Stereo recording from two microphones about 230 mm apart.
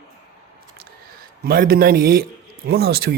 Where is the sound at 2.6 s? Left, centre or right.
Right.